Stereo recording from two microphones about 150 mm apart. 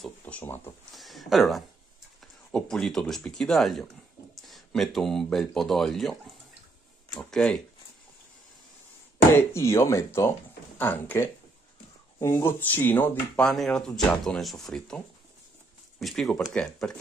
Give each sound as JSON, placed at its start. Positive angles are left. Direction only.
{"t": 0.2, "sound": "speech", "side_deg": 10}
{"t": 0.9, "sound": "speech", "side_deg": 0}
{"t": 9.3, "sound": "speech", "side_deg": 15}